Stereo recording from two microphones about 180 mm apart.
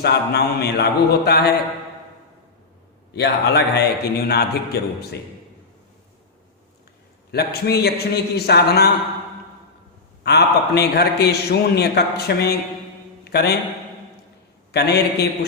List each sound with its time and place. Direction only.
0.0 s a man's voice: 65° left (ahead or behind)
3.1 s a man's voice: 65° left (ahead or behind)
7.3 s a man's voice: 65° left (ahead or behind)
10.2 s a man's voice: 65° left (ahead or behind)
14.7 s a man's voice: 65° left (ahead or behind)